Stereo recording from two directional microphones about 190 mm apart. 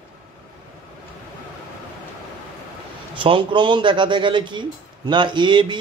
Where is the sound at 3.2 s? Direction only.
25° right (ahead or behind).